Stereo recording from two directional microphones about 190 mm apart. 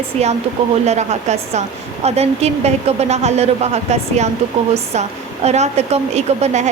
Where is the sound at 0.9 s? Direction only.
35° right (ahead or behind).